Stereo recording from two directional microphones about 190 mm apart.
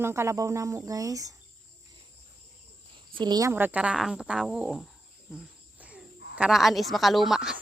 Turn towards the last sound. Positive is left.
turn(degrees=-5)  # may be behind; listen again after turning